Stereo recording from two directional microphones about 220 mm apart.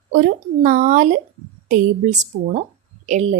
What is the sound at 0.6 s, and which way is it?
A woman's voice, 35° right (ahead or behind).